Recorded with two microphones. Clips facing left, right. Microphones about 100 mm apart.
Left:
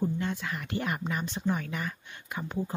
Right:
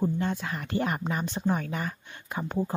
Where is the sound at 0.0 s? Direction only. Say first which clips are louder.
Right 3 dB; 35° right (ahead or behind).